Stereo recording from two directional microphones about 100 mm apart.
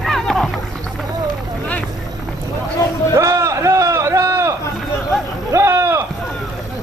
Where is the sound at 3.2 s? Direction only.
30° right (ahead or behind).